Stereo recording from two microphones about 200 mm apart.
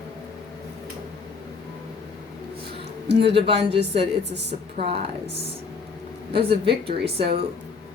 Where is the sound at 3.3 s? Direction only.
30° right (ahead or behind).